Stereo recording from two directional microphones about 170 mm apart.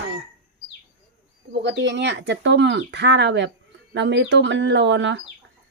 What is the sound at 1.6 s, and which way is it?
Speech, 90° right.